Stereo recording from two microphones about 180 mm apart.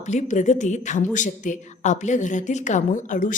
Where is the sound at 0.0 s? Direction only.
40° left (ahead or behind).